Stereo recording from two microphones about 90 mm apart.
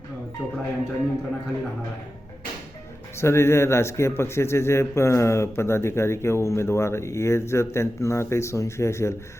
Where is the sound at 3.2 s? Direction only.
30° left (ahead or behind).